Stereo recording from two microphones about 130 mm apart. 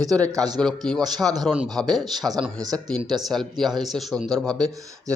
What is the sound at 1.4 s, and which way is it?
Speech, centre (ahead or behind).